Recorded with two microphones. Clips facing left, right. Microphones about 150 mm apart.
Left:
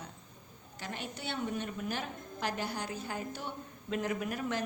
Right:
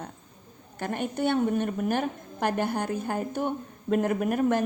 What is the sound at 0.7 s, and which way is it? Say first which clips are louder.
A woman's voice: right 12 dB; 55° right (ahead or behind).